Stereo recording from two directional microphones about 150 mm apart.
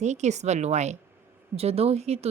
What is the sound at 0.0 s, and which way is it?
A woman's voice, 50° right (ahead or behind).